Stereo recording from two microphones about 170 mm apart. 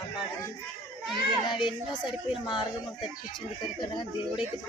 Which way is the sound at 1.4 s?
30° left (ahead or behind).